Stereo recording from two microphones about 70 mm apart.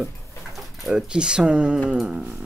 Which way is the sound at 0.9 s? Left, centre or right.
Centre.